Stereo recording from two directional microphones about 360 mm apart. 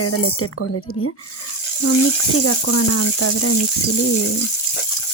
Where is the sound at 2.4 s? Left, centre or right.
Left.